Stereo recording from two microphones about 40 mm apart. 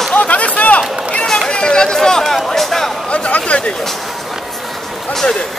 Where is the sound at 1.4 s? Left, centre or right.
Left.